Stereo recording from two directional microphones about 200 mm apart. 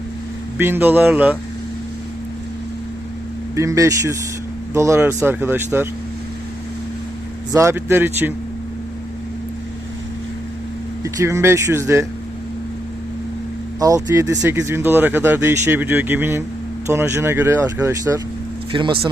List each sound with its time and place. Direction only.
0.6 s speech: 10° right (ahead or behind)
3.5 s speech: 15° right (ahead or behind)
7.5 s speech: 15° right (ahead or behind)
11.0 s speech: 15° right (ahead or behind)
13.7 s speech: 15° right (ahead or behind)
18.7 s speech: 25° right (ahead or behind)